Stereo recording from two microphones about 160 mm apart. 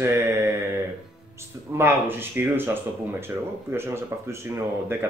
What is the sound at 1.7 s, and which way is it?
Speech, 15° right (ahead or behind).